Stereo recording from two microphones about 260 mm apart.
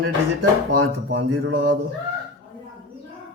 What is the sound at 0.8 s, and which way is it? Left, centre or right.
Speech, right.